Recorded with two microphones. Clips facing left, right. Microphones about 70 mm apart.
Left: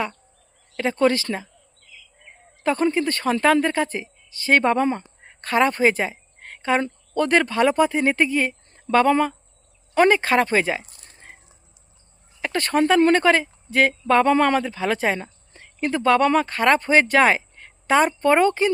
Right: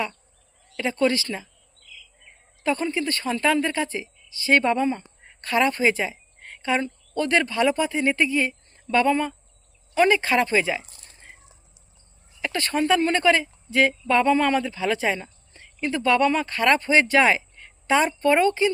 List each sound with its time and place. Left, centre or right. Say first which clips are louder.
0.7 s speech: left 3 dB; left
2.6 s speech: left 4 dB; left
4.8 s speech: left 2 dB; left
5.4 s speech: left 3 dB; left
6.8 s a sound: left 4 dB; left
7.3 s speech: left 2 dB; left
10.1 s speech: left 2 dB; left
12.4 s speech: left 4 dB; left
14.3 s speech: left 2 dB; left
14.6 s speech: left 2 dB; left
16.5 s speech: left 2 dB; left